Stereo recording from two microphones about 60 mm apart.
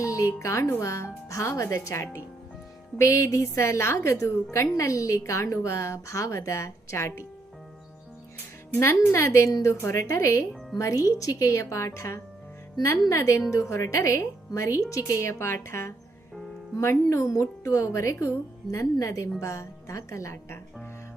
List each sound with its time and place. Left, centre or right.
0.0 s a woman's voice: left
8.8 s speech: left
10.8 s a woman's voice: left
14.8 s speech: left
15.2 s a woman's voice: left